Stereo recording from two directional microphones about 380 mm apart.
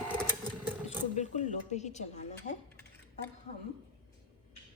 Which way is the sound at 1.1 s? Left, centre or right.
Centre.